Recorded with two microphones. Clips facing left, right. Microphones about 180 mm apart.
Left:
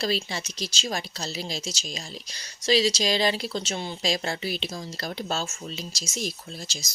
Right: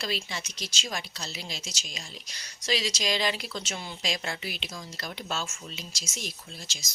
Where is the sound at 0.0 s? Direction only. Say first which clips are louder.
Left 6 dB; 35° left (ahead or behind).